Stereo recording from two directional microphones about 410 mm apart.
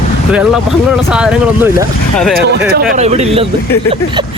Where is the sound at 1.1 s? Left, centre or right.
Centre.